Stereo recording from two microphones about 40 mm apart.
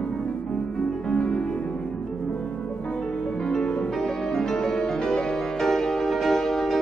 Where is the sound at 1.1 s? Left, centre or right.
Left.